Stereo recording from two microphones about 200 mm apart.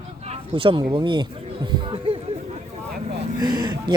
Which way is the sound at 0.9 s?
25° right (ahead or behind).